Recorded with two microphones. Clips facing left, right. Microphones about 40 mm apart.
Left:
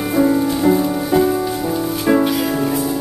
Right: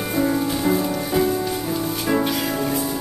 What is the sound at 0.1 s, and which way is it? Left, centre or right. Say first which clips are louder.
Music: left 6 dB; centre.